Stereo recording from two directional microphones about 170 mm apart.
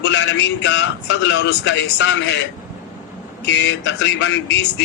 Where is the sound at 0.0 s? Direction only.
90° left.